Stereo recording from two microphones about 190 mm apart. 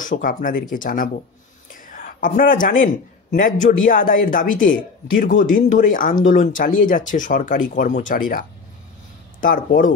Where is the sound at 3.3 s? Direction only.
45° left (ahead or behind).